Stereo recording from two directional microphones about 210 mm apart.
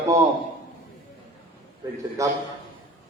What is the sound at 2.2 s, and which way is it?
Speech, 15° right (ahead or behind).